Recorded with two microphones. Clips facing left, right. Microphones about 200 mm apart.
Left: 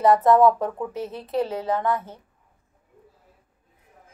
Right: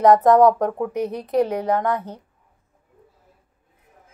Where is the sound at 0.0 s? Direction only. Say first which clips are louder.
Right 3 dB; 15° right (ahead or behind).